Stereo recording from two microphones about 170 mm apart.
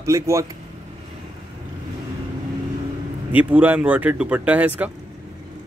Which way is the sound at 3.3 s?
10° right (ahead or behind).